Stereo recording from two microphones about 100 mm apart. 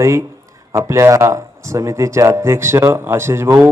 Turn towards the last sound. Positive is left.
turn(degrees=-25)  # may be behind; listen again after turning